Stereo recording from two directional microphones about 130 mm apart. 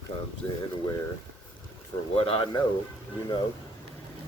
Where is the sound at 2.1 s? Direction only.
45° left (ahead or behind).